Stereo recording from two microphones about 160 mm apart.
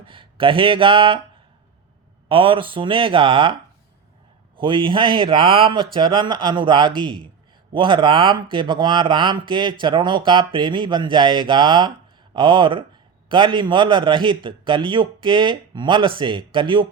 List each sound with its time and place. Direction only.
0.0 s speech: 30° right (ahead or behind)
2.3 s speech: 35° right (ahead or behind)
4.5 s speech: 30° right (ahead or behind)